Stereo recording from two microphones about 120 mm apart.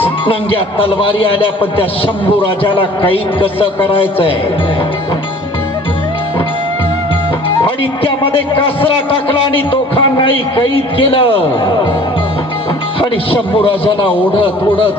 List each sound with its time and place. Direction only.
0.0 s a man's voice: 50° left (ahead or behind)
7.6 s a man's voice: 45° left (ahead or behind)
13.0 s a man's voice: 45° left (ahead or behind)